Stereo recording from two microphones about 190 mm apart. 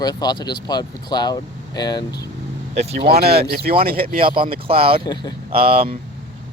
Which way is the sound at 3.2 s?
55° right (ahead or behind).